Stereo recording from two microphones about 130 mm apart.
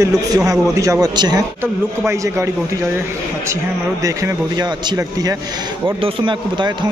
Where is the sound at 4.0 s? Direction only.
25° right (ahead or behind).